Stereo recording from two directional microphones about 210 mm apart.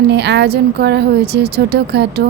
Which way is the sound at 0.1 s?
55° right (ahead or behind).